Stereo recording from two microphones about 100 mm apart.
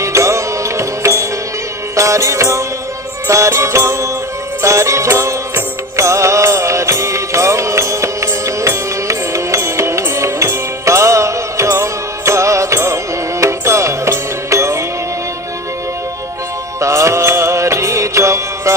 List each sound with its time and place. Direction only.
0.0 s music: 30° right (ahead or behind)
16.8 s music: 30° right (ahead or behind)